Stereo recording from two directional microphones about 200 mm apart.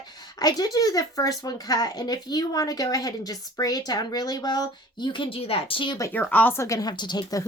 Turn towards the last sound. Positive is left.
turn(degrees=20)  # may be behind; listen again after turning